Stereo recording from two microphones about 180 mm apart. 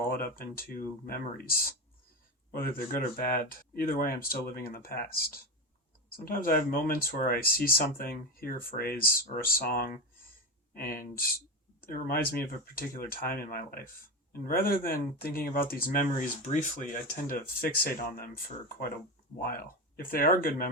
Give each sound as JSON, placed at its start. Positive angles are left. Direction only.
{"t": 0.2, "sound": "speech", "side_deg": 55}
{"t": 20.1, "sound": "speech", "side_deg": 55}